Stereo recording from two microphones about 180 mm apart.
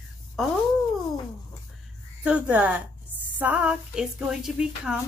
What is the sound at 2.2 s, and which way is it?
Speech, 10° right (ahead or behind).